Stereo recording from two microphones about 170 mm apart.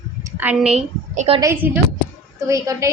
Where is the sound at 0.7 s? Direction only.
40° right (ahead or behind).